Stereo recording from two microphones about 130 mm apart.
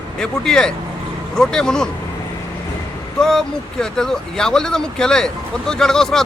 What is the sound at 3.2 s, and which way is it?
Speech, 5° left (ahead or behind).